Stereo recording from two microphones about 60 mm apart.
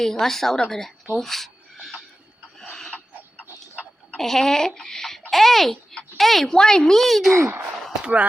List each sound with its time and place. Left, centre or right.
0.0 s speech: centre
1.1 s a sound: centre
4.2 s a child's voice: centre
8.0 s speech: right